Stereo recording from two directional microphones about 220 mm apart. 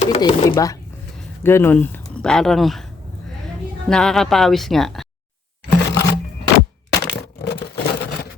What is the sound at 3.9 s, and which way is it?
Speech, centre (ahead or behind).